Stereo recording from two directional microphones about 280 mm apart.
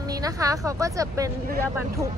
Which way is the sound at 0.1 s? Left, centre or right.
Centre.